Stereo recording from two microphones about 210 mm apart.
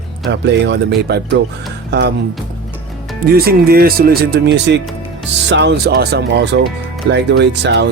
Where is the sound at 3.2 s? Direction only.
45° right (ahead or behind).